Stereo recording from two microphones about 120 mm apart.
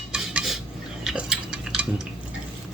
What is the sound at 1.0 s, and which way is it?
Cutlery, 5° right (ahead or behind).